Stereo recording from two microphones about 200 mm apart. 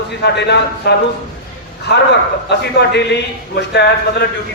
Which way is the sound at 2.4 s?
55° left (ahead or behind).